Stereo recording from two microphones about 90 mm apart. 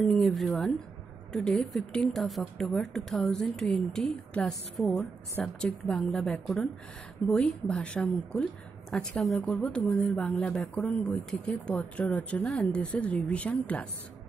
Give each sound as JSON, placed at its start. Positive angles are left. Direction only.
{"t": 0.0, "sound": "speech", "side_deg": 0}